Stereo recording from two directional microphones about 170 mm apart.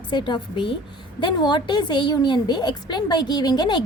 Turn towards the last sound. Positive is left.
turn(degrees=25)  # may be behind; listen again after turning